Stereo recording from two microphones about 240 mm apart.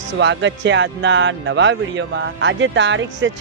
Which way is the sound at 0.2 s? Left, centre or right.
Right.